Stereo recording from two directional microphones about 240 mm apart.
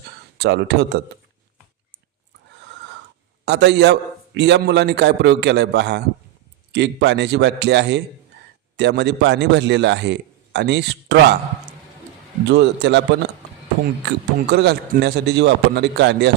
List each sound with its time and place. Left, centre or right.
0.3 s a man's voice: right
3.4 s a man's voice: right
12.5 s a man's voice: right